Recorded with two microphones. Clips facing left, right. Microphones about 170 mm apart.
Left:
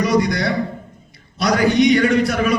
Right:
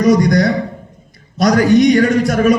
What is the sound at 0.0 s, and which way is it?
A man's voice, 45° right (ahead or behind).